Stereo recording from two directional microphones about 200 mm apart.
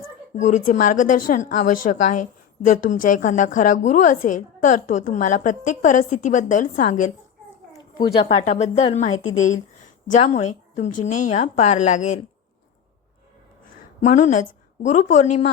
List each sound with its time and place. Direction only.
0.3 s a woman's voice: 35° left (ahead or behind)
7.8 s a sound: 20° left (ahead or behind)
8.3 s a woman's voice: 35° left (ahead or behind)
14.0 s a woman's voice: 35° left (ahead or behind)